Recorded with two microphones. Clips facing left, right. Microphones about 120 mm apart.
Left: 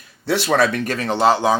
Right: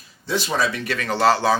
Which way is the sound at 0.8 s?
40° left (ahead or behind).